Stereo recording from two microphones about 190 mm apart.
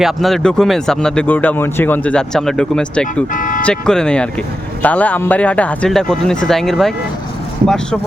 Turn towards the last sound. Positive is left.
turn(degrees=5)  # may be behind; listen again after turning